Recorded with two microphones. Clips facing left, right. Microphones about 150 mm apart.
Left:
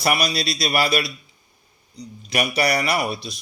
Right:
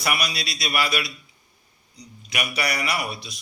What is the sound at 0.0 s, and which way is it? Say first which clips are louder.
Speech: left 5 dB; 35° left (ahead or behind).